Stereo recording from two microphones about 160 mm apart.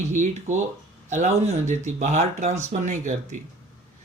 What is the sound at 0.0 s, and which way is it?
Speech, 50° right (ahead or behind).